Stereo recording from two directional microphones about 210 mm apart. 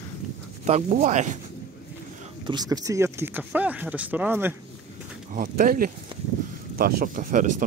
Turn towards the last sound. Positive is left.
turn(degrees=-40)  # may be behind; listen again after turning